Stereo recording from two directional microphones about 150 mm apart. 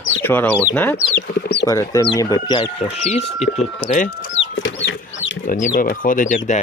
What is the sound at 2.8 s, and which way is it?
Speech, 45° left (ahead or behind).